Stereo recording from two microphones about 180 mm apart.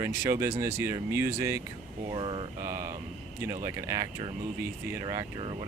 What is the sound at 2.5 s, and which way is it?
Speech, 15° right (ahead or behind).